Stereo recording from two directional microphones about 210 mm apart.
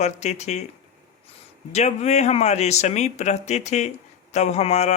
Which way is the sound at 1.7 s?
30° left (ahead or behind).